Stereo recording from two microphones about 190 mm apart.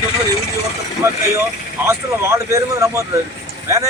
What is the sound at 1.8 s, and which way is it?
A man's voice, 15° right (ahead or behind).